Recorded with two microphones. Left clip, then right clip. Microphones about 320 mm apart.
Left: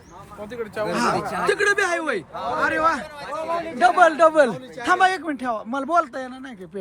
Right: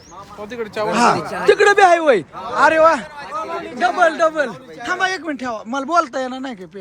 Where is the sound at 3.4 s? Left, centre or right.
Left.